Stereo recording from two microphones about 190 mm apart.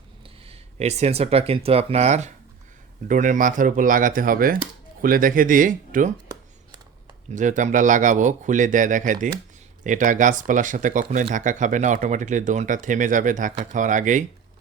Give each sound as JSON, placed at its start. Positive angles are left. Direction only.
{"t": 0.2, "sound": "speech", "side_deg": -30}
{"t": 7.3, "sound": "speech", "side_deg": -40}